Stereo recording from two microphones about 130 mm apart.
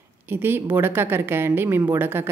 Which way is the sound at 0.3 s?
15° right (ahead or behind).